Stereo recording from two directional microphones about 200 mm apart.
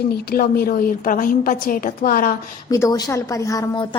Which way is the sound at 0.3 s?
50° left (ahead or behind).